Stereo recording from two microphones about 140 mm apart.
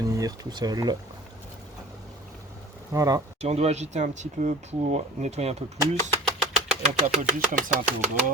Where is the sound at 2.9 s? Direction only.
25° right (ahead or behind).